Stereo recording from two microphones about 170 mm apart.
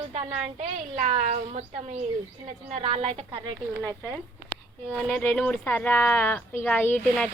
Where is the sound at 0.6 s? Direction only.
40° right (ahead or behind).